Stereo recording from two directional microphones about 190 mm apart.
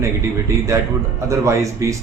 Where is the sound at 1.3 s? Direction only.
15° right (ahead or behind).